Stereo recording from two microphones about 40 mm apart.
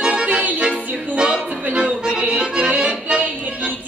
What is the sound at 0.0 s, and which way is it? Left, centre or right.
Music, right.